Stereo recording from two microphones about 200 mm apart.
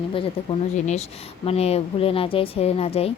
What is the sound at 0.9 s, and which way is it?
Speech, 35° left (ahead or behind).